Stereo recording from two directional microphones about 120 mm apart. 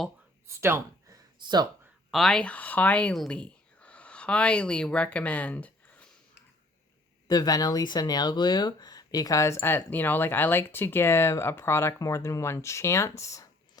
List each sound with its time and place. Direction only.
0.4 s speech: 20° right (ahead or behind)
2.0 s speech: centre (ahead or behind)
7.3 s speech: 35° left (ahead or behind)